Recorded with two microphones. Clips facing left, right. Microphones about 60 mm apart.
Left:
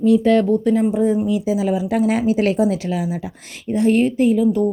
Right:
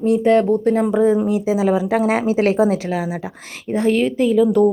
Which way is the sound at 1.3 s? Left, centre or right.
Right.